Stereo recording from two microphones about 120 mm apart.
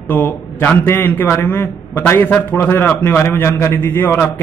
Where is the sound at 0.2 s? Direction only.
15° left (ahead or behind).